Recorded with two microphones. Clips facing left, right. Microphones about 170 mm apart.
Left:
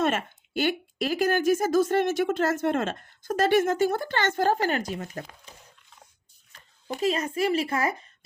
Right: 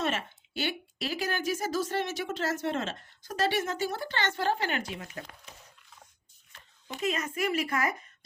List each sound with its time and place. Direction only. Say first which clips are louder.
0.0 s a woman's voice: left 6 dB; 50° left (ahead or behind)
7.0 s a woman's voice: left 5 dB; 30° left (ahead or behind)